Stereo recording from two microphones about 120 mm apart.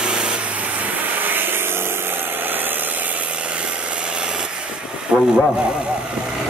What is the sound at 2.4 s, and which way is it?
Engine, 15° right (ahead or behind).